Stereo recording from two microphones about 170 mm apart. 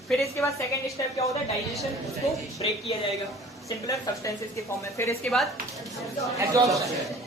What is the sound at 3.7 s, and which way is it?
Speech, 20° left (ahead or behind).